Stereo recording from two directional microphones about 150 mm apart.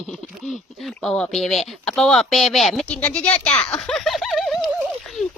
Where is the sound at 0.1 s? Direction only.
Centre (ahead or behind).